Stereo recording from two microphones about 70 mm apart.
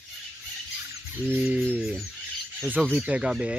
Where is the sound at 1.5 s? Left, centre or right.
Right.